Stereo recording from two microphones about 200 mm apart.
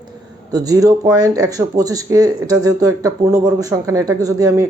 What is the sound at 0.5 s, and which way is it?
Speech, 20° right (ahead or behind).